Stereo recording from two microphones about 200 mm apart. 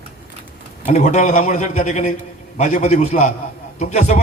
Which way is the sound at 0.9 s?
35° left (ahead or behind).